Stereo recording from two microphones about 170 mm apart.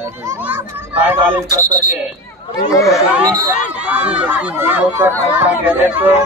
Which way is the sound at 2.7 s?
20° left (ahead or behind).